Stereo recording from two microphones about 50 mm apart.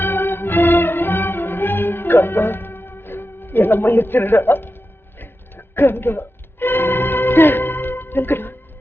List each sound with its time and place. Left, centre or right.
0.0 s music: left